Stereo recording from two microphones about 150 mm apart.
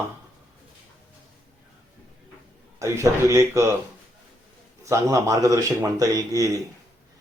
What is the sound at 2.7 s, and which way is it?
A man's voice, 20° right (ahead or behind).